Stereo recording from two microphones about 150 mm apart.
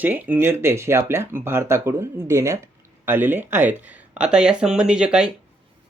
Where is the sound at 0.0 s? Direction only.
10° right (ahead or behind).